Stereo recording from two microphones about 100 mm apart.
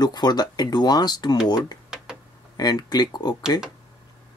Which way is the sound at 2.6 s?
40° left (ahead or behind).